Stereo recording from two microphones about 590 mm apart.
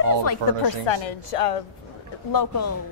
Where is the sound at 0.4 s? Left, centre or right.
Right.